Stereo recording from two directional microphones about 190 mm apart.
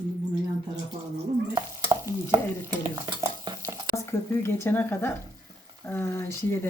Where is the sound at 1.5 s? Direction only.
20° right (ahead or behind).